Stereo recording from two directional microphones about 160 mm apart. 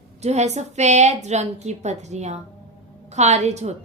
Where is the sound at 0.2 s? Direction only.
45° right (ahead or behind).